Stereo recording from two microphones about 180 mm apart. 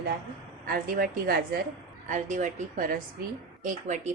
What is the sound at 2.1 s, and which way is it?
A woman's voice, 45° right (ahead or behind).